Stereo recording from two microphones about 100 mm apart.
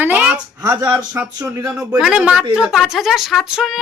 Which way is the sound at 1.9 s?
10° right (ahead or behind).